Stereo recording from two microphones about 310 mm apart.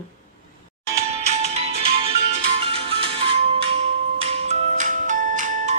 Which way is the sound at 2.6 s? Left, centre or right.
Centre.